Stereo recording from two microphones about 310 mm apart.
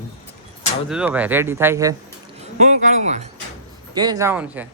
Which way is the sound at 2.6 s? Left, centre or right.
Right.